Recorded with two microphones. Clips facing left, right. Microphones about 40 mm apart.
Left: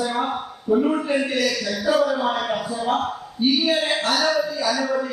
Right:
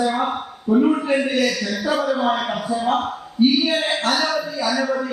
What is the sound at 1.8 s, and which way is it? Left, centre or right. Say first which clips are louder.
A man's voice: even; right.